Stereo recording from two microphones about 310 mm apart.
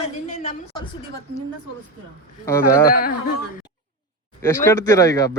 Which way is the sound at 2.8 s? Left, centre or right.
Left.